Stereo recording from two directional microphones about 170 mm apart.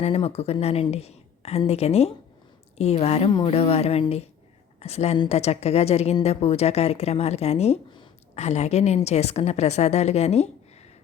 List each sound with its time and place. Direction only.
0.0 s speech: 35° left (ahead or behind)